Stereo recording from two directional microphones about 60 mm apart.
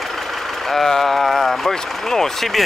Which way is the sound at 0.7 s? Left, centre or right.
Centre.